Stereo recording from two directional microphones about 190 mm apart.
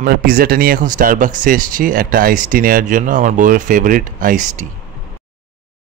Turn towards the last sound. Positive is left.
turn(degrees=-45)  # may be behind; listen again after turning